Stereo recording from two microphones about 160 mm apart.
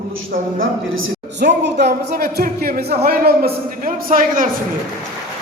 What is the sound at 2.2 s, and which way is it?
A man's voice, 70° right (ahead or behind).